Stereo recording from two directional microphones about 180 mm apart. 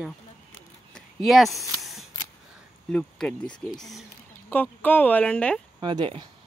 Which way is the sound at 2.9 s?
5° left (ahead or behind).